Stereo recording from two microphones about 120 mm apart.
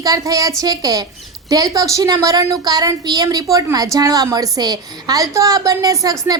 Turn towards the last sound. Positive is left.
turn(degrees=-30)  # may be behind; listen again after turning